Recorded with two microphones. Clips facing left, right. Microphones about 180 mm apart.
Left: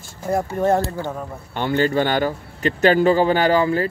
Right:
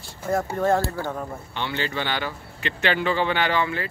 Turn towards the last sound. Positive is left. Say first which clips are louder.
# left 7 dB
turn(degrees=40)  # may be behind; listen again after turning